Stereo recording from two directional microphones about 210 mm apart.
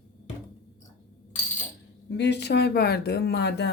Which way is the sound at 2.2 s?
55° left (ahead or behind).